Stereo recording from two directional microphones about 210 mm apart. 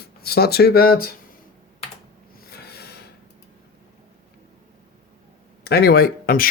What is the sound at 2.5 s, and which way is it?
Snort, 50° left (ahead or behind).